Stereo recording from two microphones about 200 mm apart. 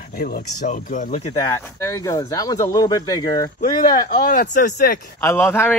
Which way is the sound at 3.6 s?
45° left (ahead or behind).